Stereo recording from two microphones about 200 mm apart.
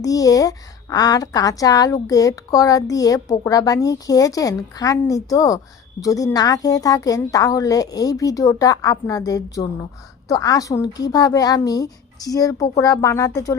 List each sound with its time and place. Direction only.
0.0 s a woman's voice: 15° left (ahead or behind)